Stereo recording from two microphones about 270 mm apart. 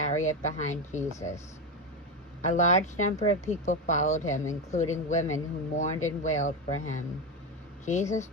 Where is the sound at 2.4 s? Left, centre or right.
Left.